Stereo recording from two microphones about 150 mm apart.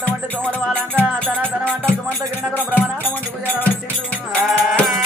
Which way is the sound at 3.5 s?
10° left (ahead or behind).